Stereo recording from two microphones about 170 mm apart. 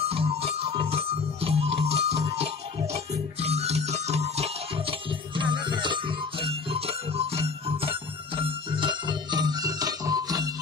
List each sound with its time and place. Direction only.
0.0 s music: 35° right (ahead or behind)